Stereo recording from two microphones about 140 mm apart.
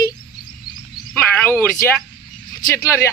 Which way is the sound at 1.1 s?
15° left (ahead or behind).